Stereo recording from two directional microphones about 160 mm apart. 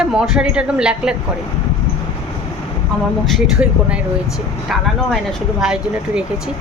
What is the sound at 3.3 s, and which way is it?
Speech, 5° right (ahead or behind).